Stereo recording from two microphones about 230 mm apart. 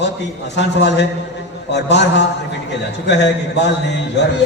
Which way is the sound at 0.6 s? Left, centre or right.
Left.